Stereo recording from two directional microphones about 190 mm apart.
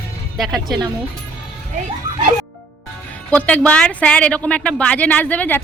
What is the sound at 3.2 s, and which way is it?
A woman's voice, 5° left (ahead or behind).